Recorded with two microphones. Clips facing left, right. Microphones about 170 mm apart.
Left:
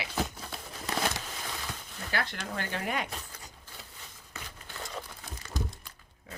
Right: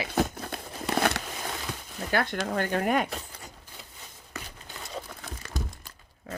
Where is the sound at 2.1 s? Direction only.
50° right (ahead or behind).